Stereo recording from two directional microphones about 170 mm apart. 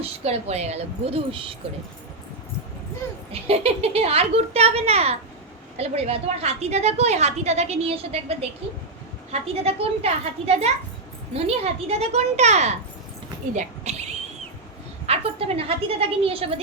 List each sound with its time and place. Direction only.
0.0 s a woman's voice: 40° right (ahead or behind)
3.4 s a woman's voice: 35° right (ahead or behind)
9.6 s a woman's voice: 35° right (ahead or behind)
13.5 s a sound: 45° right (ahead or behind)
15.0 s a woman's voice: 35° right (ahead or behind)